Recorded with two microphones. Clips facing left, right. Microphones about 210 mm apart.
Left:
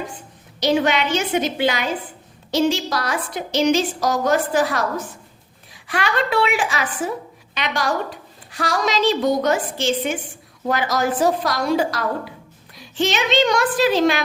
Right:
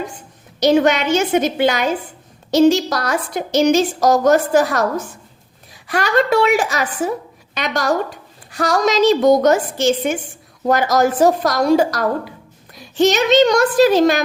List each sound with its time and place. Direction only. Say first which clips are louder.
0.6 s a woman's voice: right 5 dB; 45° right (ahead or behind)